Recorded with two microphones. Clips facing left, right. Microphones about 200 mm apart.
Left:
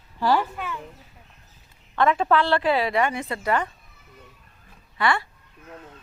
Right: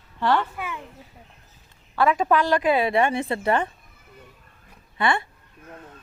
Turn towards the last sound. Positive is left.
turn(degrees=-25)  # may be behind; listen again after turning